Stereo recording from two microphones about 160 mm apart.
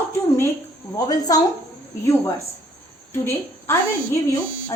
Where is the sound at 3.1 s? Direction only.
15° left (ahead or behind).